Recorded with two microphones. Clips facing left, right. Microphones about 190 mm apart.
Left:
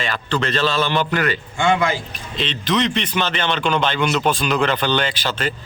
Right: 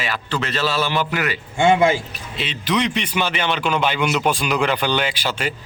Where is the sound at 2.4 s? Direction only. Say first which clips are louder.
Left 1 dB; 10° right (ahead or behind).